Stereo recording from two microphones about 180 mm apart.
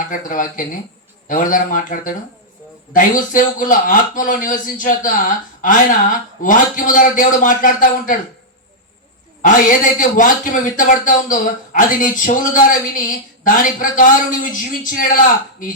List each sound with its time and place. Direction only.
0.1 s a man's voice: 50° left (ahead or behind)
9.4 s a man's voice: 45° left (ahead or behind)